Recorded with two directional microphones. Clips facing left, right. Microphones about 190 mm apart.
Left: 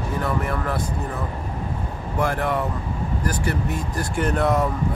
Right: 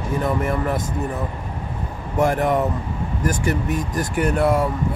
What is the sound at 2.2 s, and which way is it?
Speech, 20° right (ahead or behind).